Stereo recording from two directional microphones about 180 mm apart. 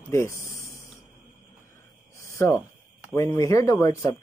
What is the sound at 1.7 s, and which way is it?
Cricket, 15° left (ahead or behind).